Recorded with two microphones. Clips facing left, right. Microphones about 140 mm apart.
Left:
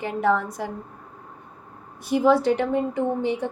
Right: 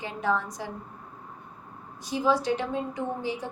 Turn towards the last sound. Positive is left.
turn(degrees=60)  # may be behind; listen again after turning